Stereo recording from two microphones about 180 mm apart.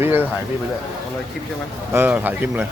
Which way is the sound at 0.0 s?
10° right (ahead or behind).